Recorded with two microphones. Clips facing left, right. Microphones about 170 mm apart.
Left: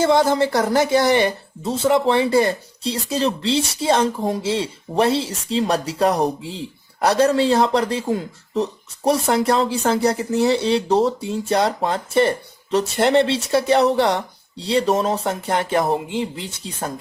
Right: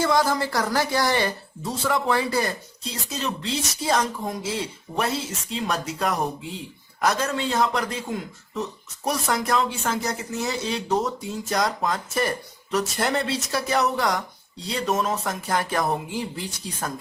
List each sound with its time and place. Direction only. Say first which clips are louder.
0.0 s a woman's voice: left 6 dB; 25° left (ahead or behind)